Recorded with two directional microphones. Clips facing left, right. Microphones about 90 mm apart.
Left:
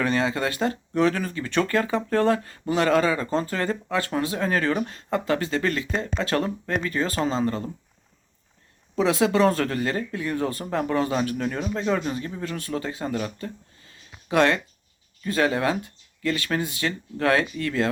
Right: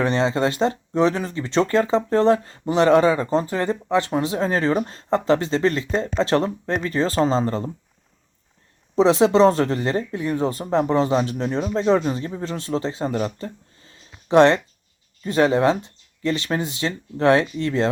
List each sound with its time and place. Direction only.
0.0 s speech: 25° right (ahead or behind)
9.0 s speech: 25° right (ahead or behind)